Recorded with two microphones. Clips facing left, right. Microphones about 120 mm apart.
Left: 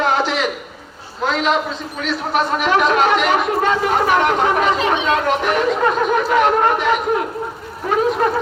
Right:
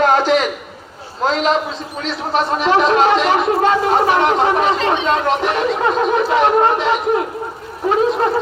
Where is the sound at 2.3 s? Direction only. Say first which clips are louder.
Right 2 dB; 30° right (ahead or behind).